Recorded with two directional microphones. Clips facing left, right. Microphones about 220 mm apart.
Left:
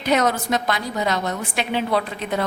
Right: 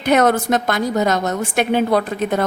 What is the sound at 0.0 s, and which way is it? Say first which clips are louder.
A woman's voice: right 5 dB; 55° right (ahead or behind).